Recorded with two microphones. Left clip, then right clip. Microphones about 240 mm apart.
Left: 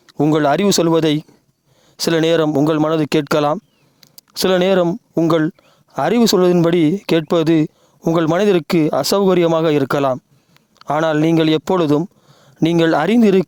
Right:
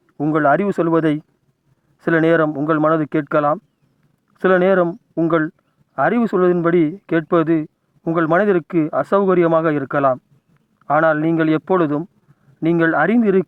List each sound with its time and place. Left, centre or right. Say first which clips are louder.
0.3 s speech: even; left